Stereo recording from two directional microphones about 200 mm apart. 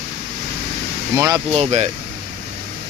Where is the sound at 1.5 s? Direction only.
30° right (ahead or behind).